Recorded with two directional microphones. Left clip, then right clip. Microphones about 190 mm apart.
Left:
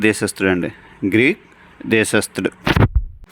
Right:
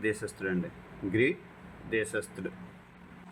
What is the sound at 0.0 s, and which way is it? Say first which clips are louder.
Speech: left 16 dB; 45° left (ahead or behind).